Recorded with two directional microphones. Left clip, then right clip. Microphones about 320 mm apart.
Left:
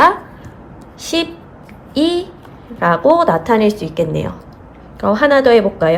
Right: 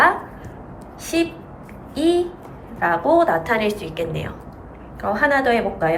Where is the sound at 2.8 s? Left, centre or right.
Centre.